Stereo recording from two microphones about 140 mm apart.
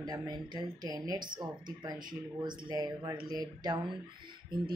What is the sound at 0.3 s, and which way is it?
Speech, 30° right (ahead or behind).